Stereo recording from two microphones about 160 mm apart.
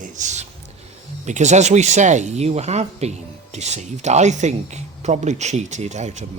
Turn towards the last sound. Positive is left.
turn(degrees=-45)  # may be behind; listen again after turning